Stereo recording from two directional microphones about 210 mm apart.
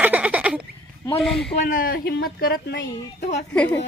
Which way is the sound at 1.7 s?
45° left (ahead or behind).